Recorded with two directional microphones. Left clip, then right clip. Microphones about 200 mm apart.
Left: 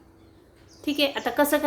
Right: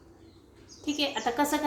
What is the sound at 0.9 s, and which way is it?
Speech, 35° left (ahead or behind).